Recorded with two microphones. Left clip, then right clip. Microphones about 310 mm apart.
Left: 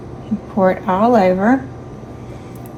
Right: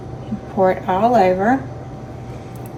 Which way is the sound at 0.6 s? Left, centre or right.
Left.